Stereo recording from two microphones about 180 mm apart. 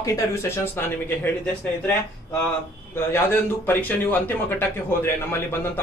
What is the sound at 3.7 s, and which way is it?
A man's voice, 10° left (ahead or behind).